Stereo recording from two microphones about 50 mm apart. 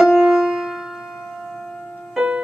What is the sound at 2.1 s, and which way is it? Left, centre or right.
Music, right.